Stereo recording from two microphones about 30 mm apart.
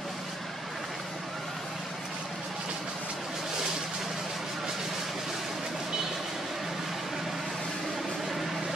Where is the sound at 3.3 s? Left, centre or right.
Centre.